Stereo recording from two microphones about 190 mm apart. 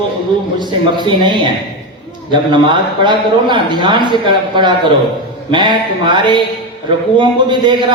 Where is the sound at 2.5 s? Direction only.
25° right (ahead or behind).